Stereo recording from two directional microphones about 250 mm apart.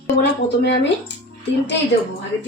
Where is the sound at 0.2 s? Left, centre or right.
Left.